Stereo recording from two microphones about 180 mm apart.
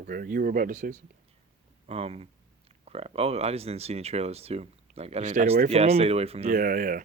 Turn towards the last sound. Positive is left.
turn(degrees=-50)  # may be behind; listen again after turning